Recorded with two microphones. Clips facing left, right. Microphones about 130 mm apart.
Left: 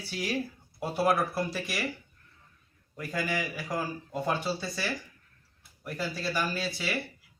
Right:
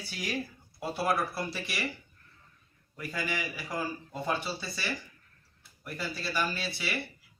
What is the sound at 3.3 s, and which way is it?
Speech, 45° left (ahead or behind).